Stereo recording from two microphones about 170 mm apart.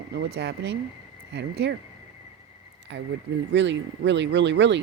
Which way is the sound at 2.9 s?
90° right.